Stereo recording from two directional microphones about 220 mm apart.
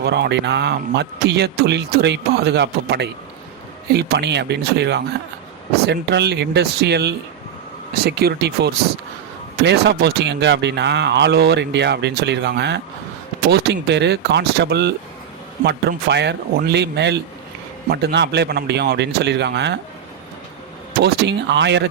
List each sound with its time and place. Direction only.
0.0 s speech: 50° right (ahead or behind)
21.0 s speech: 50° right (ahead or behind)